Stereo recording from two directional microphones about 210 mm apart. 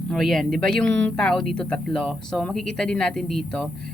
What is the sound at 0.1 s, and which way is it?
Speech, centre (ahead or behind).